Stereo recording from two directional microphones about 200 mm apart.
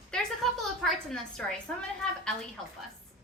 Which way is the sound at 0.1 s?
Centre (ahead or behind).